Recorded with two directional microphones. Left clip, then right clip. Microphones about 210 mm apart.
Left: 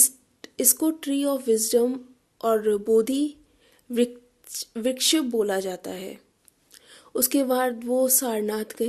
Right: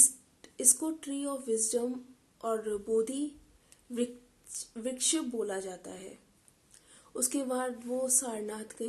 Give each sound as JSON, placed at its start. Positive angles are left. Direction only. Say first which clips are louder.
{"t": 0.0, "sound": "speech", "louder": "left 4 dB", "side_deg": 40}